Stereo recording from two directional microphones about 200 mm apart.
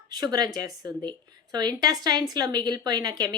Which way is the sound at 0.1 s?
20° right (ahead or behind).